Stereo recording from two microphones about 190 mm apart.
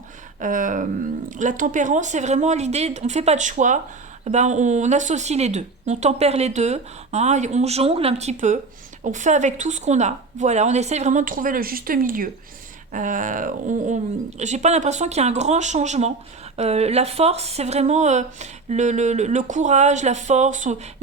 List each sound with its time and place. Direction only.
0.3 s speech: 45° right (ahead or behind)